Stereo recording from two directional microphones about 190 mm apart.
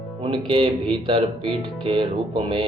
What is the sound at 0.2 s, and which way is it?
Speech, 25° right (ahead or behind).